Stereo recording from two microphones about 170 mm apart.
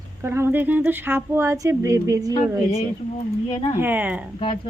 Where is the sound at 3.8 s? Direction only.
10° right (ahead or behind).